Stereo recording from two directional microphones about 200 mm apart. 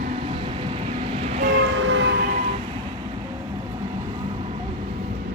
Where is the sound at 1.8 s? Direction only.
65° right (ahead or behind).